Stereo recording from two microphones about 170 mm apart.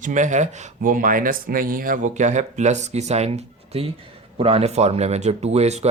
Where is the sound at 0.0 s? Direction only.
45° right (ahead or behind).